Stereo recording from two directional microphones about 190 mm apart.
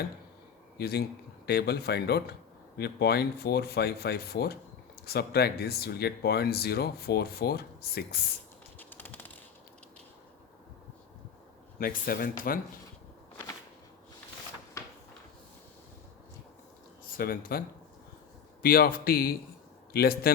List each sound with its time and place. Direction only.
0.8 s speech: 60° left (ahead or behind)
8.8 s a sound: 10° left (ahead or behind)
11.8 s speech: 50° left (ahead or behind)
14.8 s a sound: 15° left (ahead or behind)
17.1 s speech: 50° left (ahead or behind)
18.6 s speech: 50° left (ahead or behind)